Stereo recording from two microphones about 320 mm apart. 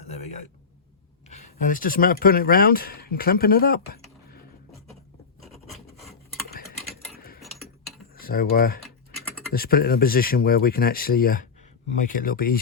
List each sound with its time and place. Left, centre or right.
1.3 s speech: left
5.5 s filing: centre
6.5 s gears: left
7.2 s keys jangling: left
8.1 s speech: left